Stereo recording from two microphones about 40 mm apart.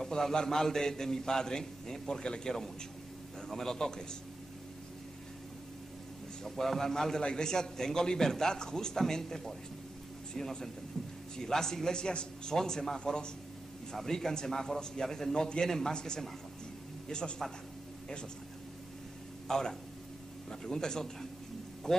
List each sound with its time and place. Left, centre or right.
0.0 s a man's voice: centre
6.4 s a man's voice: centre
19.4 s a man's voice: centre